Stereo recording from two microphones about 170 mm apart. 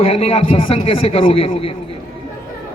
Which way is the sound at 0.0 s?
35° left (ahead or behind).